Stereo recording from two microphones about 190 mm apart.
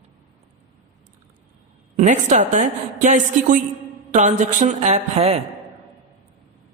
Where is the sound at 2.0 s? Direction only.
40° right (ahead or behind).